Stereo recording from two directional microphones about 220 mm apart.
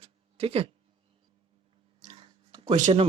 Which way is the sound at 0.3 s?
25° right (ahead or behind).